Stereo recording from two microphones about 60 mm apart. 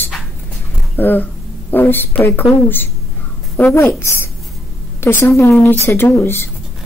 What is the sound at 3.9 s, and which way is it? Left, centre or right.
A woman's voice, left.